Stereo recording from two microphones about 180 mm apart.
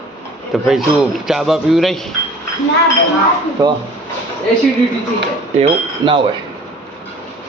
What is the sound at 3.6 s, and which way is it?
Speech, 25° right (ahead or behind).